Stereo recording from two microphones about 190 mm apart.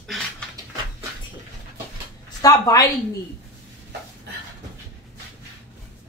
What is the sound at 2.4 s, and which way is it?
Speech, 20° left (ahead or behind).